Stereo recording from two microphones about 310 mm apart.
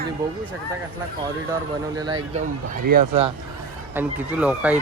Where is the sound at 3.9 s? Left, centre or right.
Centre.